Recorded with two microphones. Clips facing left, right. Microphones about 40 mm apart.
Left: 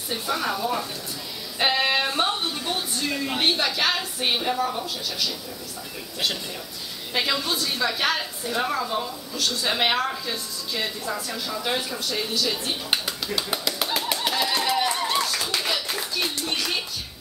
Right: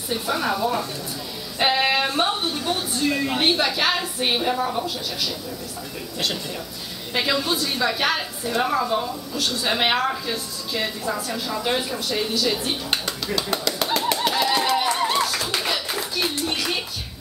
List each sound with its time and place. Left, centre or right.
0.1 s a woman's voice: centre
7.2 s a woman's voice: centre
12.9 s a sound: centre
13.9 s pigeon: centre
14.4 s a sound: centre
15.0 s clapping: centre